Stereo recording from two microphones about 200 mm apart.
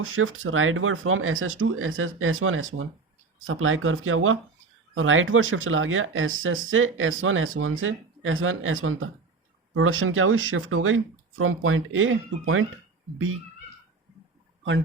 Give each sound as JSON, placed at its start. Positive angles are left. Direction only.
{"t": 0.0, "sound": "speech", "side_deg": -85}
{"t": 4.9, "sound": "speech", "side_deg": -80}
{"t": 9.7, "sound": "speech", "side_deg": -90}